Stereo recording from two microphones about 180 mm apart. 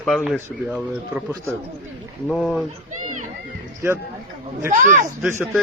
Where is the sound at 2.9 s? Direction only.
45° right (ahead or behind).